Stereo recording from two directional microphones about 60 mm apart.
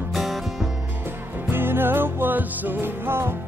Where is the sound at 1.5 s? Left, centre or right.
Right.